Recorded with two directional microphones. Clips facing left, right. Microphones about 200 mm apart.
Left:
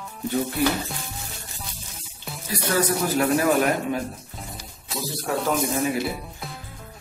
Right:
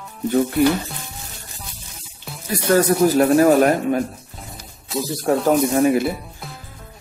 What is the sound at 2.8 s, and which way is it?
Speech, 45° right (ahead or behind).